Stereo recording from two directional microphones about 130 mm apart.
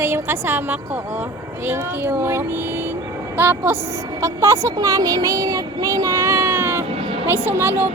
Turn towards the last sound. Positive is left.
turn(degrees=-20)  # may be behind; listen again after turning